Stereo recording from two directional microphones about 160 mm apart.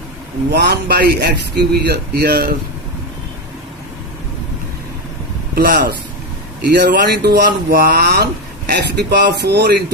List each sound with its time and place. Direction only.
0.5 s a man's voice: 90° right; by 2.6 s 70° right (ahead or behind)
5.5 s a man's voice: 65° right (ahead or behind)
6.7 s speech: 85° right